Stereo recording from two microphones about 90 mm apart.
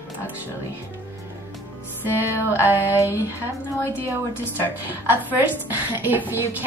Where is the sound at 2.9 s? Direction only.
30° left (ahead or behind).